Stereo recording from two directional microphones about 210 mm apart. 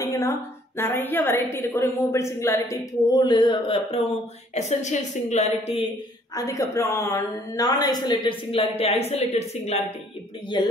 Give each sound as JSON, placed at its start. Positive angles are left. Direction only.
{"t": 0.0, "sound": "a woman's voice", "side_deg": 15}
{"t": 6.3, "sound": "a woman's voice", "side_deg": 15}